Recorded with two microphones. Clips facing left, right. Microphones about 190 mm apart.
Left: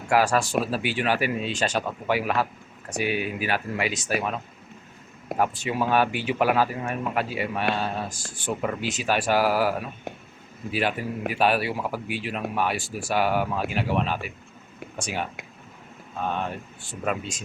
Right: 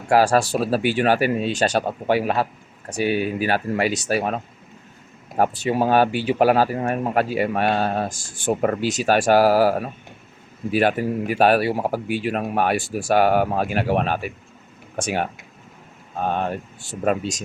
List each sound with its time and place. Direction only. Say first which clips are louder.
0.1 s speech: right 4 dB; 35° right (ahead or behind)
5.4 s speech: right 5 dB; 40° right (ahead or behind)